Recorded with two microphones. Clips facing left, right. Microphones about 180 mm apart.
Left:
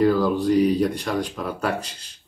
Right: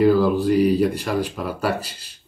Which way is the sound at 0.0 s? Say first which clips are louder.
Right 3 dB; 10° right (ahead or behind).